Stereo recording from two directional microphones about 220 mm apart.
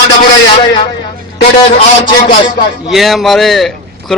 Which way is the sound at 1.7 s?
20° left (ahead or behind).